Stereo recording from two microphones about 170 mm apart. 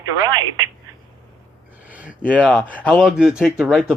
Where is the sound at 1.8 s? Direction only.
10° right (ahead or behind).